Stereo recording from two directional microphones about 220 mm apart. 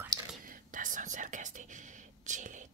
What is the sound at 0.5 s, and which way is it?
Whispering, 40° right (ahead or behind).